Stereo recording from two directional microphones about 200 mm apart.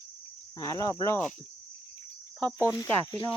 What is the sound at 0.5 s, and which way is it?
Speech, 20° left (ahead or behind).